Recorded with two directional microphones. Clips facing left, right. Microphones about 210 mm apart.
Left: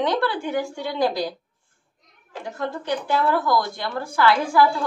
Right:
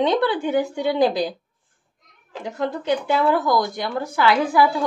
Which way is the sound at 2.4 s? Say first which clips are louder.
Right 4 dB; 20° right (ahead or behind).